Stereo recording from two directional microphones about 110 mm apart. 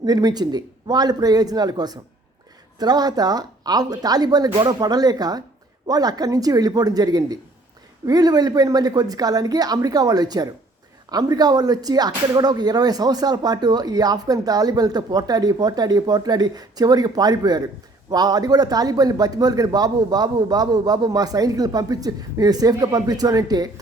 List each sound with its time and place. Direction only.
0.0 s speech: 35° right (ahead or behind)